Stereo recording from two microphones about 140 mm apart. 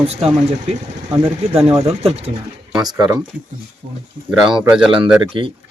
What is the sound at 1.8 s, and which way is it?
Speech, 45° right (ahead or behind).